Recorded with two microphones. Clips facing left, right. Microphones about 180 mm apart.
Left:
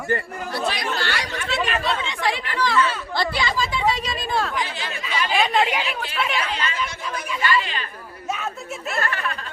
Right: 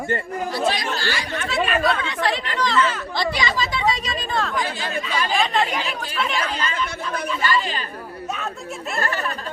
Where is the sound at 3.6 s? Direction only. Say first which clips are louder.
Even; 10° left (ahead or behind).